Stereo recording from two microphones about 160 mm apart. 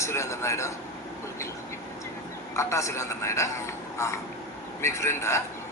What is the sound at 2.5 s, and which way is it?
A man's voice, 20° left (ahead or behind).